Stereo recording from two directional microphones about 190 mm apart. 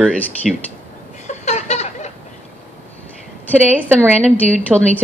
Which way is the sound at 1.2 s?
35° left (ahead or behind).